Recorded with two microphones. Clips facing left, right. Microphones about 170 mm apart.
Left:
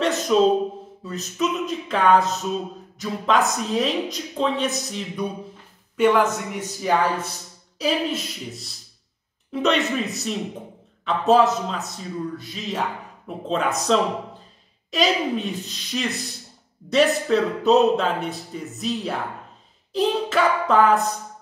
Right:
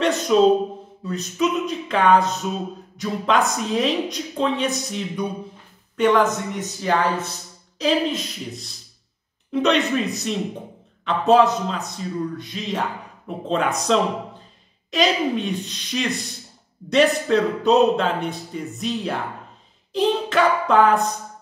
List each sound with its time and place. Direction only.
0.0 s speech: centre (ahead or behind)